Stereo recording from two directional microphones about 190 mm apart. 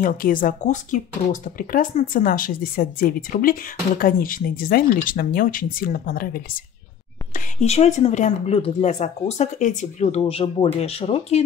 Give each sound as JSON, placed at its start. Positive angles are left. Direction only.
{"t": 0.0, "sound": "speech", "side_deg": 45}
{"t": 7.3, "sound": "speech", "side_deg": 35}